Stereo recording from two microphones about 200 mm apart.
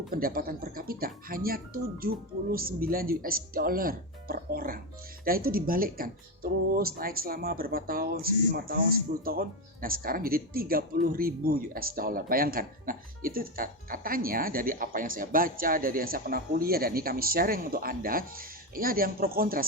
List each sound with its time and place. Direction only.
0.1 s speech: 45° right (ahead or behind)